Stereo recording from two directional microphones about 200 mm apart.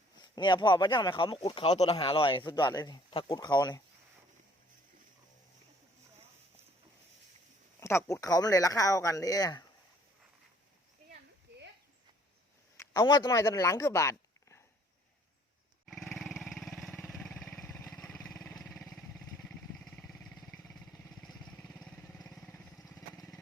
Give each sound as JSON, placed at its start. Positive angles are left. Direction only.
{"t": 0.2, "sound": "speech", "side_deg": 20}
{"t": 7.8, "sound": "speech", "side_deg": 15}
{"t": 12.7, "sound": "speech", "side_deg": 15}
{"t": 15.9, "sound": "dog", "side_deg": 0}
{"t": 18.5, "sound": "vehicle", "side_deg": 5}
{"t": 19.8, "sound": "a sound", "side_deg": 0}
{"t": 21.2, "sound": "vehicle", "side_deg": 0}